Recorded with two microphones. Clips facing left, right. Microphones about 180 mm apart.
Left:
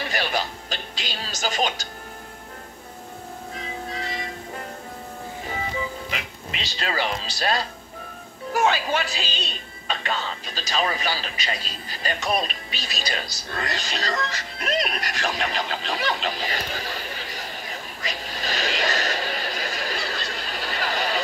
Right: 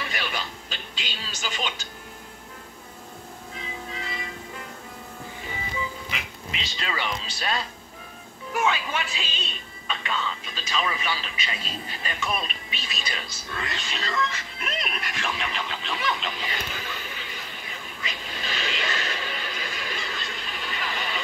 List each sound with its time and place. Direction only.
0.0 s music: 35° left (ahead or behind)
3.5 s music: 40° left (ahead or behind)
6.6 s speech: 35° left (ahead or behind)
13.5 s music: 35° left (ahead or behind)